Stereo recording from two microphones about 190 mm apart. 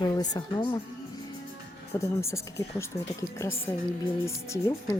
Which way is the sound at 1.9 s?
15° left (ahead or behind).